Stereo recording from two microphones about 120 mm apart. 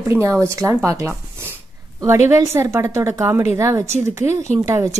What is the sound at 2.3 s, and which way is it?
Speech, 25° right (ahead or behind).